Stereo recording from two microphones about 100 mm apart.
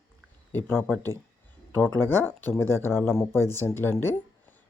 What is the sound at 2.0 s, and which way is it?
Speech, 20° left (ahead or behind).